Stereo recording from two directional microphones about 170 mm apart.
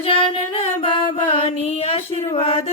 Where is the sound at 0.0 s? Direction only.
30° left (ahead or behind).